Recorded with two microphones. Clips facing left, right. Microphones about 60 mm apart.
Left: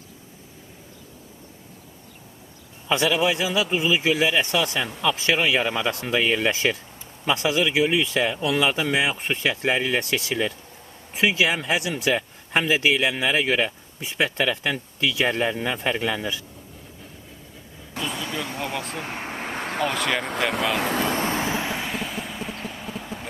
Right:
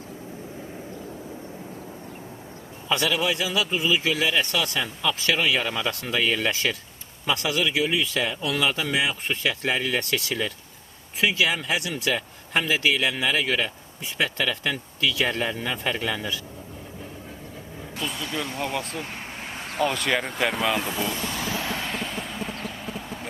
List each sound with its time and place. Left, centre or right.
2.9 s speech: centre
18.0 s speech: centre
19.2 s vehicle: left
19.8 s speech: centre
20.7 s speech: left
21.1 s vehicle: left; by 23.2 s centre